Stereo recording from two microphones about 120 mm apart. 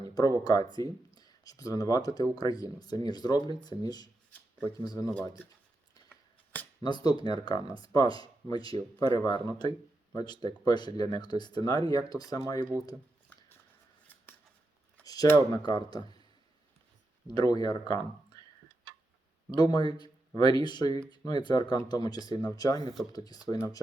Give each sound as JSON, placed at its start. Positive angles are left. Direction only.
{"t": 0.4, "sound": "speech", "side_deg": 35}
{"t": 6.8, "sound": "speech", "side_deg": 35}
{"t": 15.0, "sound": "a sound", "side_deg": 30}
{"t": 15.5, "sound": "speech", "side_deg": 35}
{"t": 17.2, "sound": "speech", "side_deg": 35}
{"t": 19.5, "sound": "speech", "side_deg": 35}